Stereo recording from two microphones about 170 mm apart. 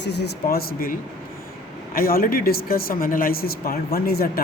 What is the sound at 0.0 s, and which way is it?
Speech, 80° left.